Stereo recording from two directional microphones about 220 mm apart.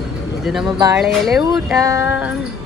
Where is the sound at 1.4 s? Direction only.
15° right (ahead or behind).